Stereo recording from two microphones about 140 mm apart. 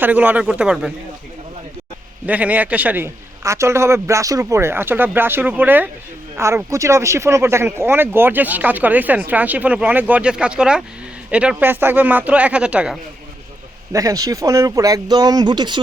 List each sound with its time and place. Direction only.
0.0 s speech: 10° right (ahead or behind)
2.2 s speech: 10° right (ahead or behind)
13.9 s speech: 25° right (ahead or behind)